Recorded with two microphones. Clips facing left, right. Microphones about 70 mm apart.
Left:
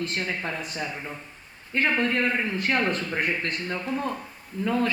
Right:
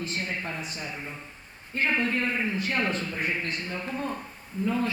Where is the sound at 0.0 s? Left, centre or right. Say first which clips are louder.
Left 3 dB; left.